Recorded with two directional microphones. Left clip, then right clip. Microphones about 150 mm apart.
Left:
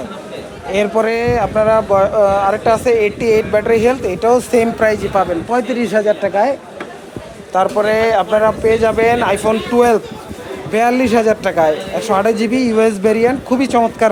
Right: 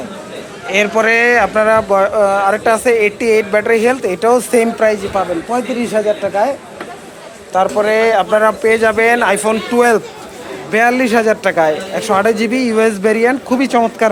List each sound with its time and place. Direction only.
0.7 s speech: 30° left (ahead or behind); by 4.6 s 15° left (ahead or behind)
4.8 s a woman's voice: 40° left (ahead or behind)
5.1 s a man's voice: 85° left
7.8 s speech: 25° left (ahead or behind)
8.3 s speech: 10° left (ahead or behind)